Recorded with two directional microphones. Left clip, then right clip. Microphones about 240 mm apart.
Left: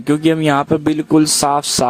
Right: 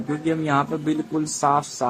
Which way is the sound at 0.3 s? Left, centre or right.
Left.